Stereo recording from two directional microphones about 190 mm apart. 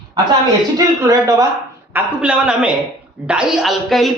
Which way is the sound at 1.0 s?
15° right (ahead or behind).